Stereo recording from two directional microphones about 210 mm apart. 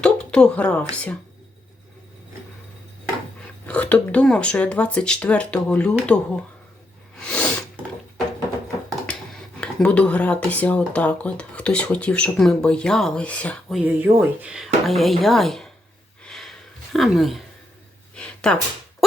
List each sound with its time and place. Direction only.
0.0 s a woman's voice: 5° left (ahead or behind)
3.4 s speech: 5° left (ahead or behind)
7.3 s sneeze: 5° left (ahead or behind)
9.0 s speech: 5° left (ahead or behind)
16.2 s a sound: centre (ahead or behind)